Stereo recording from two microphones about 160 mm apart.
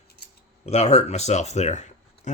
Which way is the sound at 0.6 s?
40° left (ahead or behind).